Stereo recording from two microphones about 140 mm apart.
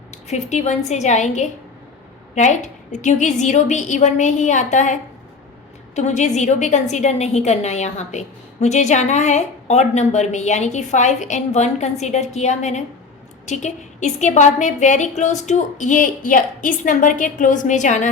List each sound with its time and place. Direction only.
0.3 s a woman's voice: 55° left (ahead or behind)